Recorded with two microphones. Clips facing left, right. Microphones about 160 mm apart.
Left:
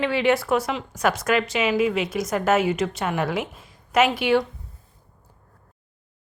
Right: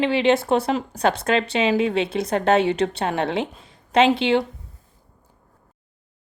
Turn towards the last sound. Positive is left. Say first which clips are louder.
# right 2 dB
turn(degrees=-25)  # may be behind; listen again after turning